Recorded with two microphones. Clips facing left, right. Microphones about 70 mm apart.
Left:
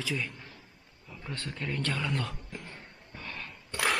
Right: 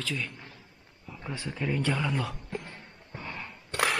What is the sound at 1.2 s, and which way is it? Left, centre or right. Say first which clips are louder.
Speech: right 4 dB; centre.